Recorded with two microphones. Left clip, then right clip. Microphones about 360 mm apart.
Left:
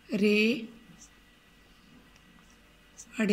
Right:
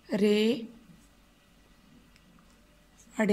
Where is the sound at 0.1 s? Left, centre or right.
Right.